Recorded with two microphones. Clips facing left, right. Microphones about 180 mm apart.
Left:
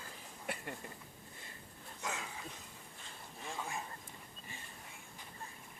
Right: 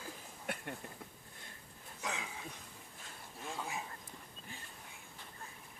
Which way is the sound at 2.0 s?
Centre (ahead or behind).